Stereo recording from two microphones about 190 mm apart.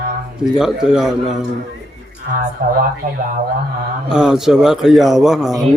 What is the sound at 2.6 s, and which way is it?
Speech, 50° right (ahead or behind).